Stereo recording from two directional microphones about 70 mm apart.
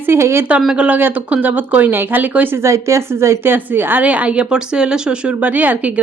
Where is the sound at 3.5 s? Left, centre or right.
Right; by 5.4 s centre.